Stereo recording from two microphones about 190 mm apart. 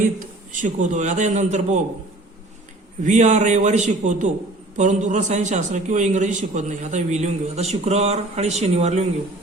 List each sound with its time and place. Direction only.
0.5 s a man's voice: 40° right (ahead or behind)
3.0 s a man's voice: 40° right (ahead or behind)